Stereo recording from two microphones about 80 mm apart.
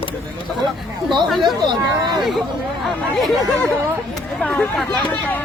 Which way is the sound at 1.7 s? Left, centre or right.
Right.